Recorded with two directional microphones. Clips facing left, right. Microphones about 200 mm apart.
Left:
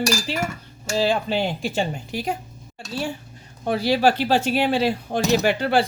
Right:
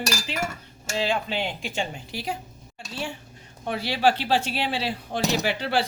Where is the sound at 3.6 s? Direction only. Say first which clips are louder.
Left 4 dB; 40° left (ahead or behind).